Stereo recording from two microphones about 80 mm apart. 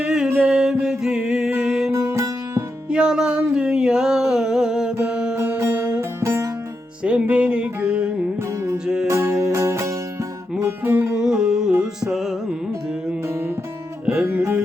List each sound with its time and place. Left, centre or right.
0.0 s music: centre
1.9 s music: right
2.9 s music: centre
5.4 s music: right
7.0 s music: centre
9.0 s music: right
10.8 s music: right
11.2 s music: centre
14.0 s music: centre